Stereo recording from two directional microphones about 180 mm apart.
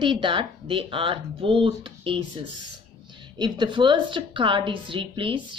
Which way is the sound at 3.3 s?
25° right (ahead or behind).